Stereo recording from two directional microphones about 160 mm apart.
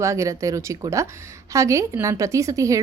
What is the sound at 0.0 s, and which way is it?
A woman's voice, 20° right (ahead or behind).